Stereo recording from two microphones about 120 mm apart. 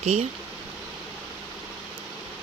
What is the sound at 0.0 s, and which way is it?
Speech, 65° right (ahead or behind).